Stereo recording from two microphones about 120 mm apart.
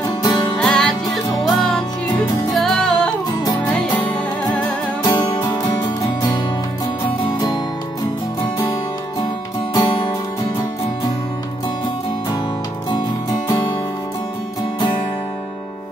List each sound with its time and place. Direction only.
0.6 s music: 5° left (ahead or behind)
5.0 s music: 35° left (ahead or behind)
9.8 s music: 45° left (ahead or behind)